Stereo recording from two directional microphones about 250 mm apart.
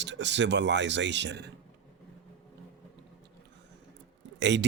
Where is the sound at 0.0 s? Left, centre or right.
Right.